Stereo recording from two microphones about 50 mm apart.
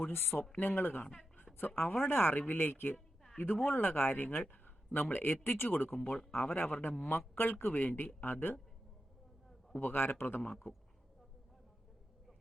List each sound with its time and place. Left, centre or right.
0.0 s speech: left
0.5 s a man's voice: left
1.0 s a woman's voice: centre
1.5 s a man's voice: left
9.8 s speech: left
10.4 s a man's voice: left